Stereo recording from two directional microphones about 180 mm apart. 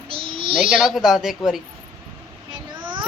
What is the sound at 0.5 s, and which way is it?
A woman's voice, 5° right (ahead or behind).